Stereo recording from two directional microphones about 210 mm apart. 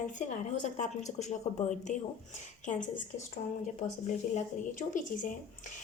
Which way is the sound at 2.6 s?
35° left (ahead or behind).